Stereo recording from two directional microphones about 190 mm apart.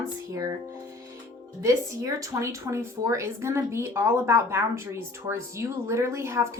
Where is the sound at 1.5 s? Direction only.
15° right (ahead or behind).